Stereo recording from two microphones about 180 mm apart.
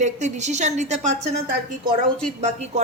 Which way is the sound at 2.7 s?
40° right (ahead or behind).